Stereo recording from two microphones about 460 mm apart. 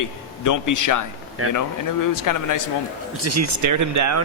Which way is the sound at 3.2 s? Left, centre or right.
Right.